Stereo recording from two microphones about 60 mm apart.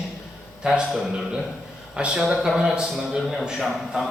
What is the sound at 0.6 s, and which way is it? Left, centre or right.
Speech, centre.